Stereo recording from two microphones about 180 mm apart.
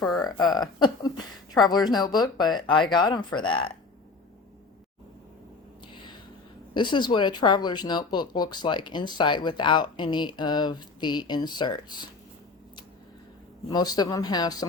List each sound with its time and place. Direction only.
0.2 s speech: 20° left (ahead or behind)
5.8 s a sound: 25° left (ahead or behind)
6.7 s speech: 25° left (ahead or behind)
13.7 s speech: 20° left (ahead or behind)